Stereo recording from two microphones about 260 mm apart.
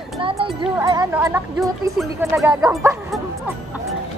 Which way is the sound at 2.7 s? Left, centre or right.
Centre.